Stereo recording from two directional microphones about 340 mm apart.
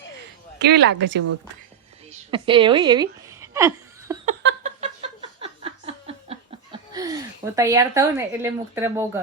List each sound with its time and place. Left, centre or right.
0.6 s speech: right
2.3 s laughter: centre
4.3 s a sound: right